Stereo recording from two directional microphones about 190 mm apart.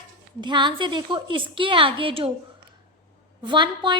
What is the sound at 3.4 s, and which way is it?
Speech, 25° right (ahead or behind).